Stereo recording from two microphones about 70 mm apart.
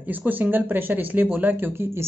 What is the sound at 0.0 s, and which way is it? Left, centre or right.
Speech, right.